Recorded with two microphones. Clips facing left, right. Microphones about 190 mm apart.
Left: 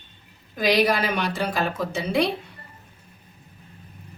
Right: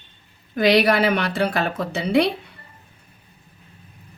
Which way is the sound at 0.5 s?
65° right (ahead or behind).